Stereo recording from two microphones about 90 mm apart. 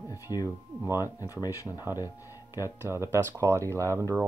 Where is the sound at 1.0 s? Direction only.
40° left (ahead or behind).